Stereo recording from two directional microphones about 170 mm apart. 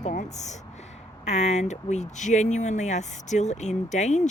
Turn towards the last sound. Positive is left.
turn(degrees=45)  # may be behind; listen again after turning